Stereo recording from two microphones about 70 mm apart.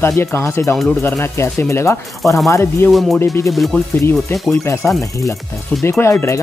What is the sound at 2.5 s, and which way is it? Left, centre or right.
Speech, left.